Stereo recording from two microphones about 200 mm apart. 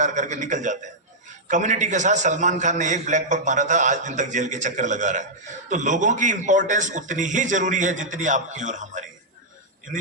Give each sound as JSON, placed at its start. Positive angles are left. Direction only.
{"t": 0.0, "sound": "a man's voice", "side_deg": -35}